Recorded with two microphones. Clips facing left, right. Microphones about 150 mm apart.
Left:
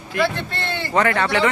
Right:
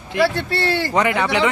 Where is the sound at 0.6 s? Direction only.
90° right.